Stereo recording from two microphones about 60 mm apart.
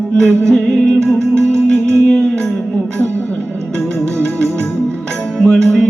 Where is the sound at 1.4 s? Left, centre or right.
Right.